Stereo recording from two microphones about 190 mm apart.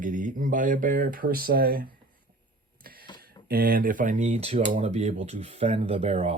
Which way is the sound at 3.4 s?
55° right (ahead or behind).